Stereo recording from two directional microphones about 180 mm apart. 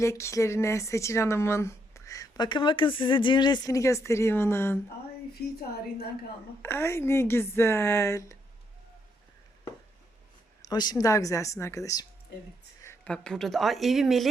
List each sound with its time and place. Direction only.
0.0 s speech: 15° left (ahead or behind)
5.3 s a woman's voice: 60° left (ahead or behind)
6.6 s speech: 15° left (ahead or behind)
10.6 s speech: 20° left (ahead or behind)
12.8 s a sound: 15° left (ahead or behind)
13.1 s speech: 5° left (ahead or behind)